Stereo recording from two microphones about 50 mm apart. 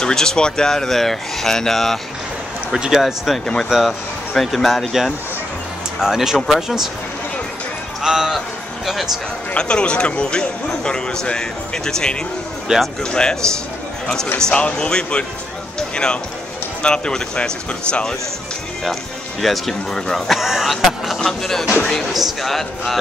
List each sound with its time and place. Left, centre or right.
0.0 s speech: centre
2.7 s speech: centre
4.3 s speech: centre
5.9 s speech: centre
8.0 s a man's voice: centre
9.5 s speech: centre
12.7 s speech: centre
13.0 s a man's voice: centre
19.4 s speech: centre
21.2 s speech: centre